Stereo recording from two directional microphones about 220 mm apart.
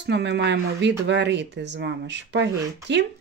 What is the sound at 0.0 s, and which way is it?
Speech, 50° right (ahead or behind).